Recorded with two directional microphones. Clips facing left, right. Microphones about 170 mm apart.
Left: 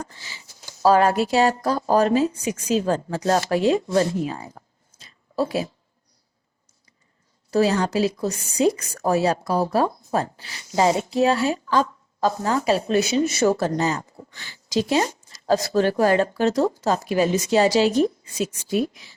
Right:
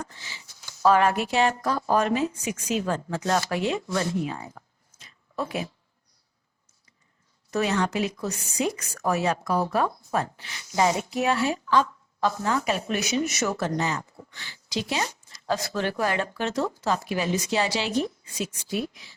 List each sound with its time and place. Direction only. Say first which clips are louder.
0.0 s speech: left 2 dB; 35° left (ahead or behind)
7.5 s a woman's voice: left 5 dB; 35° left (ahead or behind)